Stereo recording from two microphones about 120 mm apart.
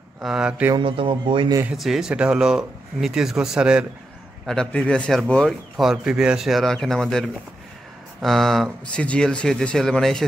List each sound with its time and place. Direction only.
0.2 s speech: 5° right (ahead or behind)
0.7 s speech: 45° right (ahead or behind)
1.8 s speech: 5° right (ahead or behind)
4.5 s speech: 5° left (ahead or behind)